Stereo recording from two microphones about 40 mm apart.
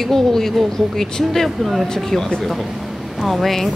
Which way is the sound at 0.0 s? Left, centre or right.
Centre.